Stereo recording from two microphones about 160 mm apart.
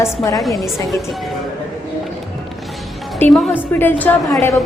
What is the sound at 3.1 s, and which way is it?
A woman's voice, 10° left (ahead or behind).